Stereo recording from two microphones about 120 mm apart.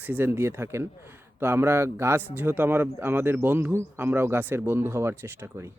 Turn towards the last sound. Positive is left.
turn(degrees=-20)  # may be behind; listen again after turning